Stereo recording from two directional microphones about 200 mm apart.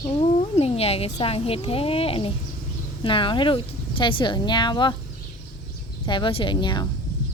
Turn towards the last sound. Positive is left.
turn(degrees=25)  # may be behind; listen again after turning